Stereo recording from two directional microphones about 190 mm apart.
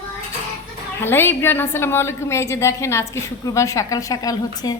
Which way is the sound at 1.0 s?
10° left (ahead or behind).